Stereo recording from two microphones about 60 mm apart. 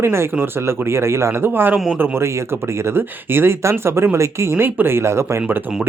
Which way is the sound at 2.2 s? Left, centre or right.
Right.